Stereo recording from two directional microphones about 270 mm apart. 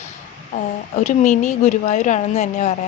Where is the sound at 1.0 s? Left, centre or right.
Left.